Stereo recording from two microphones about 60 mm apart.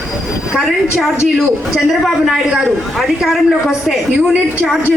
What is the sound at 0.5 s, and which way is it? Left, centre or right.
A woman's voice, centre.